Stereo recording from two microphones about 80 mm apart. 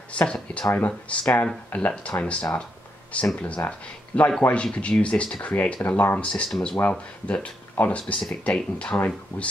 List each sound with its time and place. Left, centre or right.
0.1 s speech: centre
6.5 s speech: centre
6.8 s speech: centre